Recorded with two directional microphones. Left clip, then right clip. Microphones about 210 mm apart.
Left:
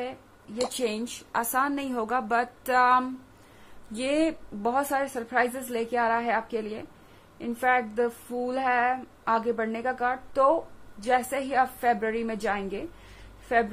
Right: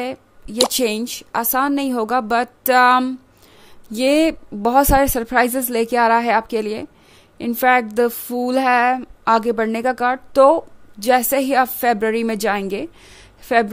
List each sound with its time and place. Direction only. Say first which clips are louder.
0.0 s speech: right 9 dB; 55° right (ahead or behind)